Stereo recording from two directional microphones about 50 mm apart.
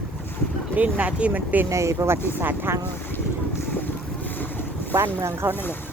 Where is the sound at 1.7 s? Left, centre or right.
Right.